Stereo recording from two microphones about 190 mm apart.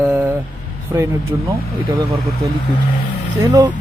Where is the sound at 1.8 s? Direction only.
25° right (ahead or behind).